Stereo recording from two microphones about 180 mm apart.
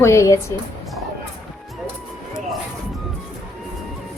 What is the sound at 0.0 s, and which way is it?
Speech, 15° left (ahead or behind).